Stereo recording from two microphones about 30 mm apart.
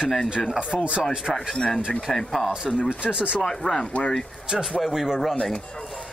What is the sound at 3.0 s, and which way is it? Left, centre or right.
Speech, right.